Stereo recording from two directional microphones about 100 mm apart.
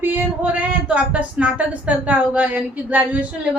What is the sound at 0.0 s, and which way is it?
Speech, 20° right (ahead or behind).